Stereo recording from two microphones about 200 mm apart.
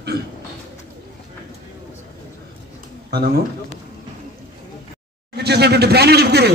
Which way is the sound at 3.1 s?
50° right (ahead or behind).